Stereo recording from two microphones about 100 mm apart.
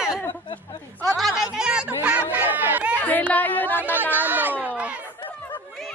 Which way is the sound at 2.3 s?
20° right (ahead or behind).